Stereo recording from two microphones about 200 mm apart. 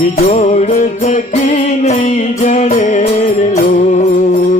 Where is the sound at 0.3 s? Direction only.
35° left (ahead or behind).